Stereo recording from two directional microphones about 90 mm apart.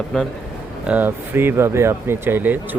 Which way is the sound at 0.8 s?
20° right (ahead or behind).